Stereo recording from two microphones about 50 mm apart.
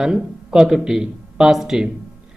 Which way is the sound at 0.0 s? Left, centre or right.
Centre.